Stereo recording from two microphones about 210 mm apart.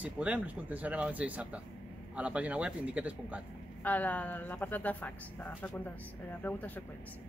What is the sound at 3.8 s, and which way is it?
Speech, 5° left (ahead or behind).